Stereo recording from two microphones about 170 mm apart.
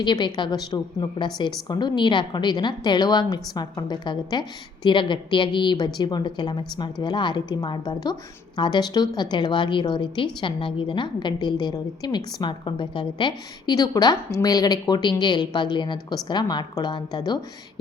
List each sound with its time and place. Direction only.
0.0 s a woman's voice: 25° left (ahead or behind)